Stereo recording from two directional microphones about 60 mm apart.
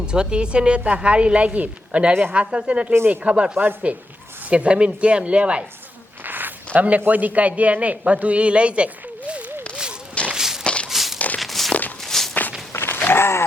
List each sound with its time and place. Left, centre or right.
0.0 s a man's voice: centre
3.6 s speech: right
4.4 s a man's voice: centre
6.2 s a sound: right
6.7 s a man's voice: right
10.3 s walk: centre
10.6 s walk: centre
10.8 s walk: centre
12.3 s walk: left
12.7 s a sound: left